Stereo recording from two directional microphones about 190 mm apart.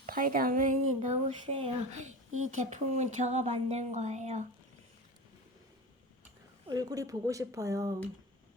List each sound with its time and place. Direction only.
0.0 s speech: 45° right (ahead or behind)
6.7 s speech: 20° right (ahead or behind)